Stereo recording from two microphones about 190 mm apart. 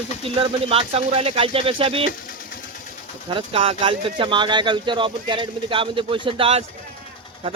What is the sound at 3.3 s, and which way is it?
Speech, 30° right (ahead or behind).